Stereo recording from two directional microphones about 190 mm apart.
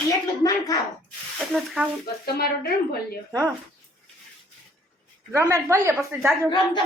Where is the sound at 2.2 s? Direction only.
55° left (ahead or behind).